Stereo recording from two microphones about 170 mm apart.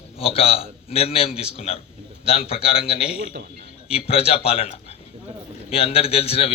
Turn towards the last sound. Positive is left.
turn(degrees=35)  # may be behind; listen again after turning